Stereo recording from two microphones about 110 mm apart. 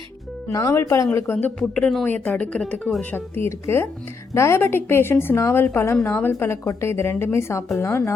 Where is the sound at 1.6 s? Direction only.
5° left (ahead or behind).